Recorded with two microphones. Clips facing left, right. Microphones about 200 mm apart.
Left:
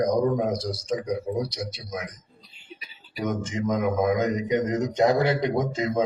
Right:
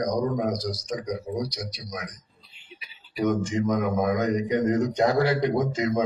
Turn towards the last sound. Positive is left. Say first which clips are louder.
# even
turn(degrees=25)  # may be behind; listen again after turning